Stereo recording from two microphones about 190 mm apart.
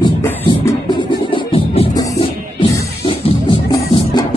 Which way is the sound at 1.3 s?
30° left (ahead or behind).